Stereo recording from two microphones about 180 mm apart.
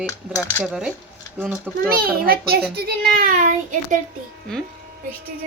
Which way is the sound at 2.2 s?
55° right (ahead or behind).